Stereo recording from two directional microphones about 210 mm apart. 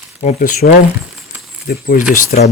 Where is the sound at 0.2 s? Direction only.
35° left (ahead or behind).